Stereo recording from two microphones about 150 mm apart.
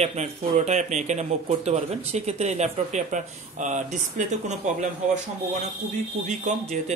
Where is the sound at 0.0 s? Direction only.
45° right (ahead or behind).